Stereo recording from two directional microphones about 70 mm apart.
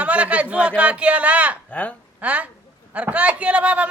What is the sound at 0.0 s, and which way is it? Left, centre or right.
A man's voice, centre.